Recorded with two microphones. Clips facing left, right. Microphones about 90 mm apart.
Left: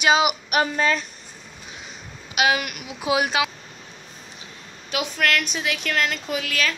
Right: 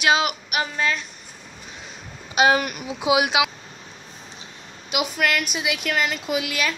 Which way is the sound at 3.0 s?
10° right (ahead or behind).